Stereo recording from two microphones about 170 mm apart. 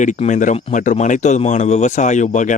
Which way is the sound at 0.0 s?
45° left (ahead or behind).